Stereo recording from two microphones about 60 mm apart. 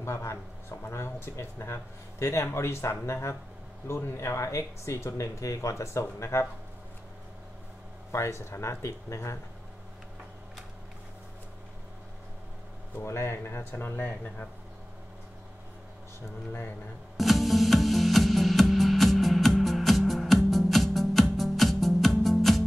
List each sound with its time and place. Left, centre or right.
0.0 s speech: left
1.7 s speech: left
8.1 s speech: left
13.0 s speech: left
16.2 s speech: left
17.2 s music: centre